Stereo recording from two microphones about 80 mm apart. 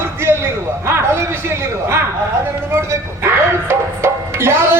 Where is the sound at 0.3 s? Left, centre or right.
Right.